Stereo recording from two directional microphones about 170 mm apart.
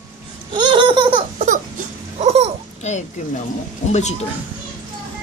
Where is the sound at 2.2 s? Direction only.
35° right (ahead or behind).